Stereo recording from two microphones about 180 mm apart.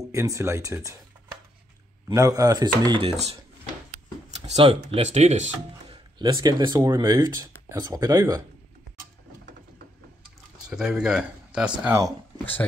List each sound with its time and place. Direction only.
0.1 s speech: 15° right (ahead or behind)
2.0 s speech: 20° right (ahead or behind); by 3.3 s 35° right (ahead or behind)
4.5 s speech: 35° right (ahead or behind)
6.1 s speech: 25° right (ahead or behind)
10.7 s speech: 5° right (ahead or behind)